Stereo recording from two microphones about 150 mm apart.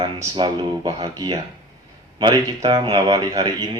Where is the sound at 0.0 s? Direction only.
30° right (ahead or behind).